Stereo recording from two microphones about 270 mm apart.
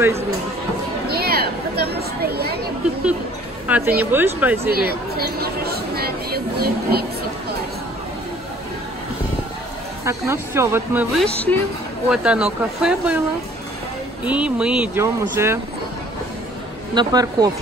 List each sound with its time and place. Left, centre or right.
1.0 s a sound: right
3.6 s a woman's voice: centre
4.7 s chatter: right
10.0 s speech: centre
14.2 s speech: centre
16.9 s speech: centre